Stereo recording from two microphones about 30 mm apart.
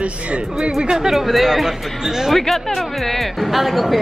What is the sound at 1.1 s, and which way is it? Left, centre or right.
Speech, centre.